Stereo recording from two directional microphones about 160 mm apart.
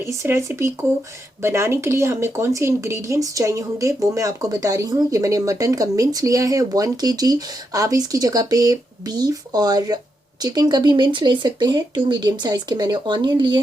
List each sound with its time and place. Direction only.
0.0 s speech: 15° right (ahead or behind)